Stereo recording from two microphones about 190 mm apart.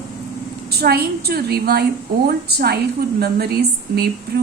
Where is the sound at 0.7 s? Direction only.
55° right (ahead or behind).